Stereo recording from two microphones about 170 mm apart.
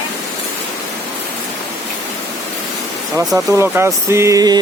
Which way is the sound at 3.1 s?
10° right (ahead or behind).